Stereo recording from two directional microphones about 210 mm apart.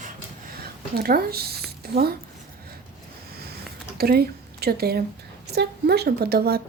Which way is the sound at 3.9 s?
45° right (ahead or behind).